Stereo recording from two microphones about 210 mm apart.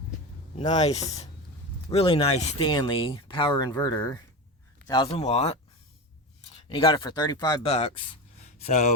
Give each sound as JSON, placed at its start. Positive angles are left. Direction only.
{"t": 0.6, "sound": "speech", "side_deg": 35}